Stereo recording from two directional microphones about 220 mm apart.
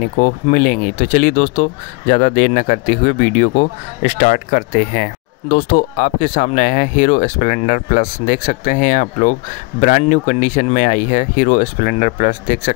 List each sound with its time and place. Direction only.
0.2 s speech: 40° left (ahead or behind)